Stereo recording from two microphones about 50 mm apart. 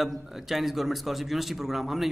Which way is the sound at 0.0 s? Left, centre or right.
Centre.